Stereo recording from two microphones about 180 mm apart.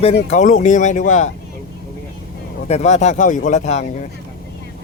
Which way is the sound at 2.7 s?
40° left (ahead or behind).